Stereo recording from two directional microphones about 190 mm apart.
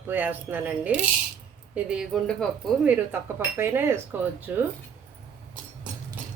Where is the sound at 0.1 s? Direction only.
10° right (ahead or behind).